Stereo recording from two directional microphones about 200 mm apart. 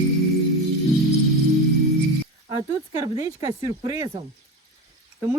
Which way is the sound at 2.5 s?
20° right (ahead or behind).